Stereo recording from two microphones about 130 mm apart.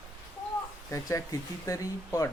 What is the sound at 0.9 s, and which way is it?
Speech, 25° left (ahead or behind).